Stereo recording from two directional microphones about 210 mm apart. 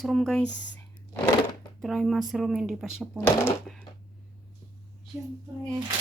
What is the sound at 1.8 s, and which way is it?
Speech, centre (ahead or behind).